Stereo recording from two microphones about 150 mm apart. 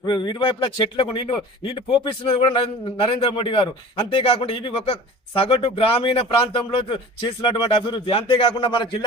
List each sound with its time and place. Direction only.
0.0 s speech: 30° left (ahead or behind)